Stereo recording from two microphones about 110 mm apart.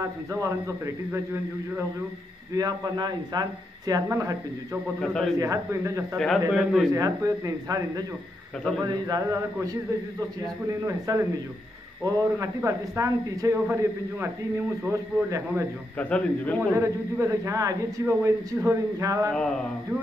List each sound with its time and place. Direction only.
0.0 s a man's voice: 30° right (ahead or behind)
2.5 s a man's voice: 35° right (ahead or behind)
5.0 s a man's voice: 5° left (ahead or behind)
5.4 s a man's voice: 30° right (ahead or behind)
6.1 s a man's voice: 5° left (ahead or behind)
6.9 s a man's voice: 30° right (ahead or behind)
10.4 s a man's voice: 30° right (ahead or behind)
15.2 s a man's voice: 25° right (ahead or behind)
16.0 s a man's voice: 10° left (ahead or behind)
16.7 s a man's voice: 25° right (ahead or behind)
19.3 s a man's voice: 5° left (ahead or behind)